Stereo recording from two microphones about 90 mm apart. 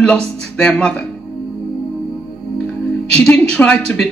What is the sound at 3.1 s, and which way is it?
Speech, 15° left (ahead or behind).